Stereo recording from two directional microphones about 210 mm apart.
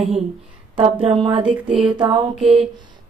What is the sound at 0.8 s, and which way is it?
Speech, 25° right (ahead or behind).